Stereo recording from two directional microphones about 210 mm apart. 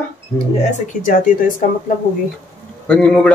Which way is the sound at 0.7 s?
40° left (ahead or behind).